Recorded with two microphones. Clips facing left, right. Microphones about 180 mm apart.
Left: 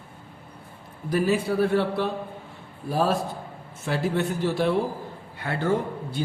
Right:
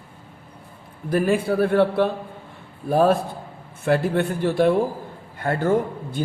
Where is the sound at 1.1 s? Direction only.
55° right (ahead or behind).